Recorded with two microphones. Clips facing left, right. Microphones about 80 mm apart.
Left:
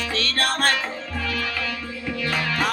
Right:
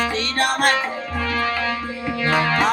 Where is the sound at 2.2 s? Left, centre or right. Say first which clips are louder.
Right 7 dB; right.